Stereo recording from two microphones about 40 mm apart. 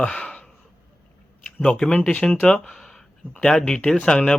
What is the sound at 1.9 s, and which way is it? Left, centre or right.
Speech, left.